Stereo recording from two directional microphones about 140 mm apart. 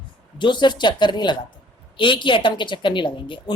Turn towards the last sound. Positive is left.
turn(degrees=35)  # may be behind; listen again after turning